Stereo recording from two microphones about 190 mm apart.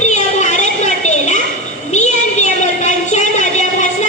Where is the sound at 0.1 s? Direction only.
40° left (ahead or behind).